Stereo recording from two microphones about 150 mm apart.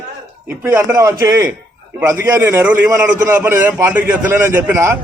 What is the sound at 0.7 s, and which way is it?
A man's voice, 20° right (ahead or behind).